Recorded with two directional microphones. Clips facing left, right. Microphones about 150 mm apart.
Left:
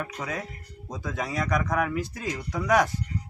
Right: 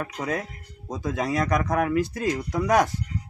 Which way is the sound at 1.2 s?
35° right (ahead or behind).